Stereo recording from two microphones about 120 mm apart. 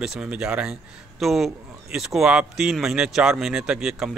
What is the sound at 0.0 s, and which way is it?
Speech, 5° right (ahead or behind).